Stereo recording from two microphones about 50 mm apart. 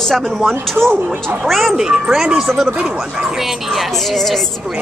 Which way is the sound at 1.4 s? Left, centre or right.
Centre.